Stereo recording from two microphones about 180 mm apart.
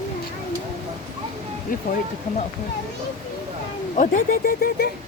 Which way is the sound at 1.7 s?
50° left (ahead or behind).